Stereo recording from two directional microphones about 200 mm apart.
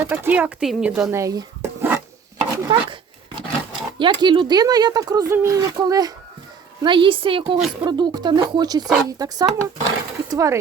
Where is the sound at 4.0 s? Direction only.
25° right (ahead or behind).